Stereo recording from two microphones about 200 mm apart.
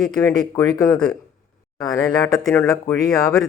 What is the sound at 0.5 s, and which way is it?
Speech, 15° left (ahead or behind).